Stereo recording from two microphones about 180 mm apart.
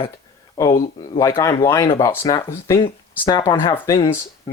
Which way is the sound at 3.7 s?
15° left (ahead or behind).